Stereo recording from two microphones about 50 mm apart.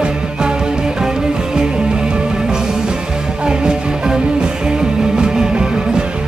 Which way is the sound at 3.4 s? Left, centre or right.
Centre.